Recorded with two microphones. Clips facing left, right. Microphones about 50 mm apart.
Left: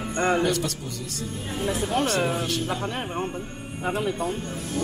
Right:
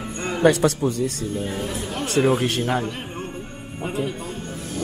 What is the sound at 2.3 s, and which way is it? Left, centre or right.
Speech, right.